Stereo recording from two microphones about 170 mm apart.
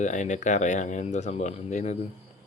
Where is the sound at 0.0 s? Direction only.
45° left (ahead or behind).